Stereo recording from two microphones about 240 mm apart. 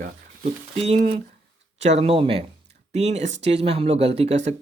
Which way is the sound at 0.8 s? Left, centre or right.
Right.